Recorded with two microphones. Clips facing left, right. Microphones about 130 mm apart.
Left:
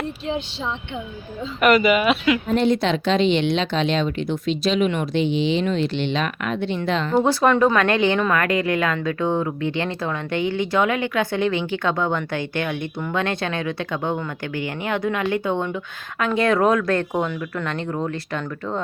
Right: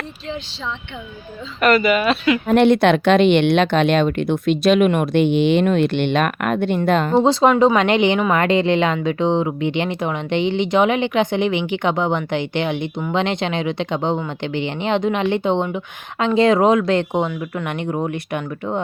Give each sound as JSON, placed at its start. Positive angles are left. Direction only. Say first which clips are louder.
{"t": 1.6, "sound": "speech", "louder": "right 1 dB", "side_deg": 15}
{"t": 2.5, "sound": "speech", "louder": "right 9 dB", "side_deg": -70}
{"t": 7.1, "sound": "speech", "louder": "right 2 dB", "side_deg": -20}